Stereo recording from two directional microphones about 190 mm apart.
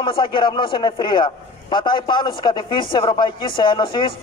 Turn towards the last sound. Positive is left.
turn(degrees=25)  # may be behind; listen again after turning